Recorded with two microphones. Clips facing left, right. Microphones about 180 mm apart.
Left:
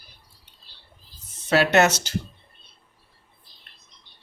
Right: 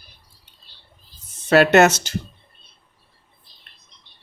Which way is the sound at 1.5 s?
55° right (ahead or behind).